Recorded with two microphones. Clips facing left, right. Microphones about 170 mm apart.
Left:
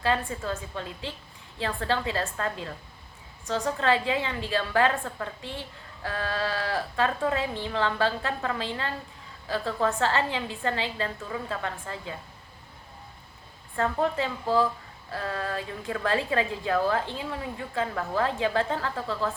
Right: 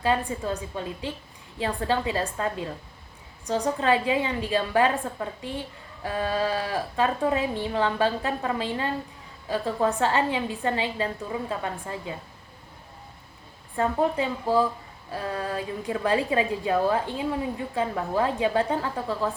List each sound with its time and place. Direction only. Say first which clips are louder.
0.0 s a woman's voice: right 2 dB; 15° right (ahead or behind)
13.7 s a woman's voice: right 2 dB; 15° right (ahead or behind)